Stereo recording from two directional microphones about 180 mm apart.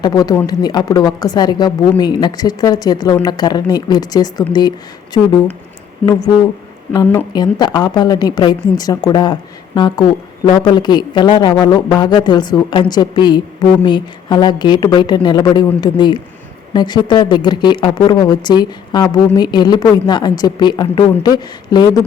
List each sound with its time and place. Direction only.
0.0 s a woman's voice: 20° left (ahead or behind)
6.0 s a woman's voice: 10° left (ahead or behind)